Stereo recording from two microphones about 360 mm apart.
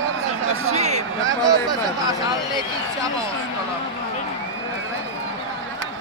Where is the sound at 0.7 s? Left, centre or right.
Centre.